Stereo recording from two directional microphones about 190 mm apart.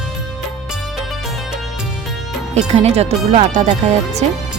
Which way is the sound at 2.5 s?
35° right (ahead or behind).